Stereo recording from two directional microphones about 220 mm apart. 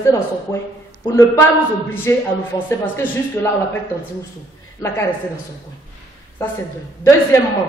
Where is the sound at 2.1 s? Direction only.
10° left (ahead or behind).